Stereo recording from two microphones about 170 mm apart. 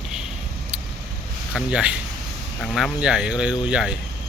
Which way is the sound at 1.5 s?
5° right (ahead or behind).